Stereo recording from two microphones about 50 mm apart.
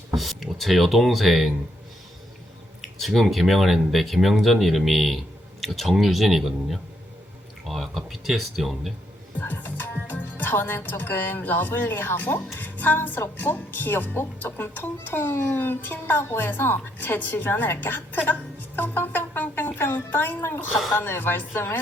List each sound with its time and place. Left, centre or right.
0.2 s speech: centre
2.8 s speech: centre
9.4 s a woman's voice: left
15.2 s a woman's voice: left
18.8 s music: left
20.1 s a woman's voice: left